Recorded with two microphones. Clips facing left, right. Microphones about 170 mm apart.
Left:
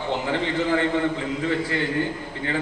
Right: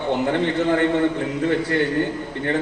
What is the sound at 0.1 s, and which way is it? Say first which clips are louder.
A man's voice: right 5 dB; 60° right (ahead or behind).